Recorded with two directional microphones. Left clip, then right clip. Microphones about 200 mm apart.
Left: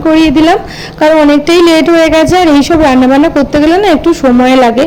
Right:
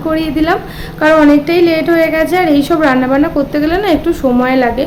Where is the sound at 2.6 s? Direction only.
30° left (ahead or behind).